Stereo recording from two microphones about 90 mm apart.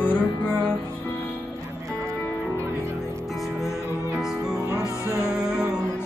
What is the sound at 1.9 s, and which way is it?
Music, 5° left (ahead or behind).